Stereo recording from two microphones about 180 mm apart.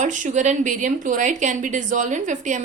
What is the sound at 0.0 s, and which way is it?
A woman's voice, 45° right (ahead or behind).